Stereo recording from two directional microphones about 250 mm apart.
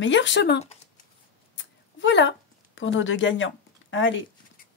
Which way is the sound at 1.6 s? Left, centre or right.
Left.